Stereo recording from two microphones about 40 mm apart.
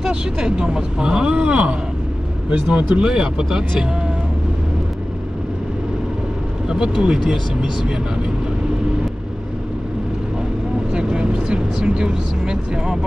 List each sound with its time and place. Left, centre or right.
0.0 s speech: centre
3.2 s speech: centre
6.7 s speech: centre
10.9 s speech: right